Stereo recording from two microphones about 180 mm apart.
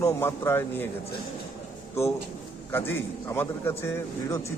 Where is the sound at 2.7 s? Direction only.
10° left (ahead or behind).